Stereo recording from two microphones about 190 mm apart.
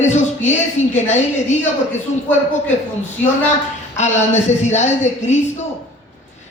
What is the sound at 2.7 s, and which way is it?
Speech, 40° left (ahead or behind).